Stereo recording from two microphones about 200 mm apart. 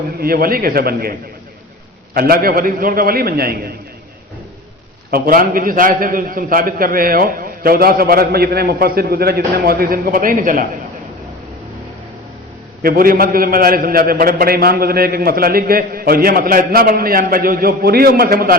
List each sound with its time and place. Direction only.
0.2 s a man's voice: 50° right (ahead or behind)
2.1 s a man's voice: 45° right (ahead or behind)
5.1 s a man's voice: 45° right (ahead or behind)
12.8 s a man's voice: 45° right (ahead or behind)